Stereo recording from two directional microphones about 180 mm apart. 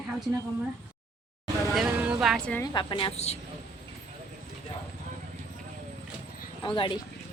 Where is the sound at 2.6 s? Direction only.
25° left (ahead or behind).